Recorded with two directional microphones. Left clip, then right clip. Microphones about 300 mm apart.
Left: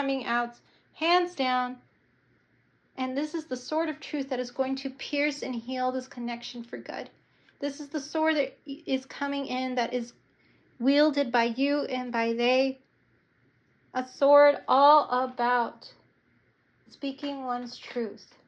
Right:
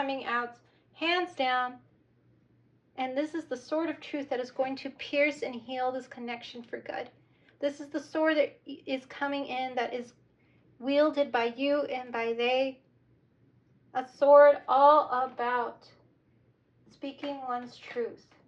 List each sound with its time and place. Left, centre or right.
0.1 s a sound: centre
0.9 s speech: centre
2.9 s a woman's voice: centre
13.9 s a woman's voice: left